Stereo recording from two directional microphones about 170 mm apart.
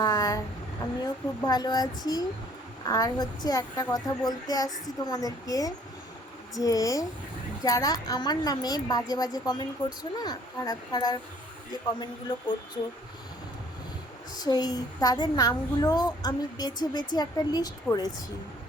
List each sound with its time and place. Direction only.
0.0 s a sound: 20° left (ahead or behind)
1.0 s a woman's voice: 25° left (ahead or behind)
12.3 s a woman's voice: 25° left (ahead or behind)
14.3 s a woman's voice: 25° left (ahead or behind)